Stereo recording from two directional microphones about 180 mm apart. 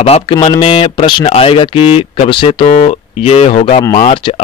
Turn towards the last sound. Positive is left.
turn(degrees=30)  # may be behind; listen again after turning